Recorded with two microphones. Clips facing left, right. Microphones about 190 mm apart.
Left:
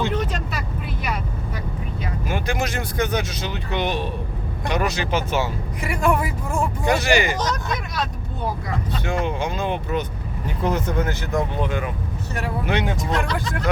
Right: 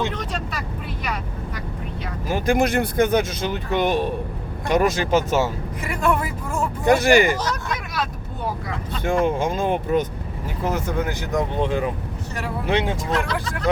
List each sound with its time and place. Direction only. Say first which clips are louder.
2.2 s vehicle: right 6 dB; 40° right (ahead or behind)
2.6 s speech: right 6 dB; 55° right (ahead or behind)
5.9 s a man's voice: left 1 dB; 10° left (ahead or behind)
6.8 s speech: right 5 dB; 50° right (ahead or behind)
7.3 s speech: left 1 dB; 10° right (ahead or behind)
9.0 s speech: right 5 dB; 50° right (ahead or behind)
10.6 s speech: left 1 dB; 5° right (ahead or behind); by 13.0 s 25° right (ahead or behind)